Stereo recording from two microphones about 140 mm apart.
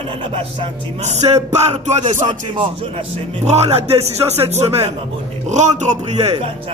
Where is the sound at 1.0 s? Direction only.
50° right (ahead or behind).